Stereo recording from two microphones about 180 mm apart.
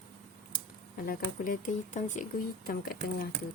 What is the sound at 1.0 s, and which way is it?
A woman's voice, 50° left (ahead or behind).